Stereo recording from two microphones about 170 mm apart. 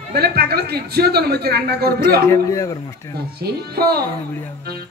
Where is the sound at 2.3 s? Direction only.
20° left (ahead or behind).